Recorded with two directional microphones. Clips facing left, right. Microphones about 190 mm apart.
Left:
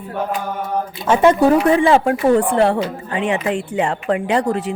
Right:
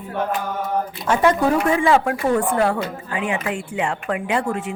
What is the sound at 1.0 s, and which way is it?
Speech, 25° left (ahead or behind).